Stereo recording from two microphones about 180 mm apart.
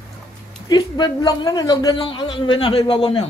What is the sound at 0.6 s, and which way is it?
A man's voice, 20° left (ahead or behind).